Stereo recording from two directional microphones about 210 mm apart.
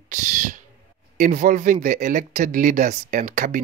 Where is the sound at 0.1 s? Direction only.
35° right (ahead or behind).